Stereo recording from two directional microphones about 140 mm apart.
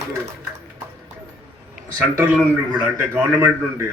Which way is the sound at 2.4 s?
10° right (ahead or behind).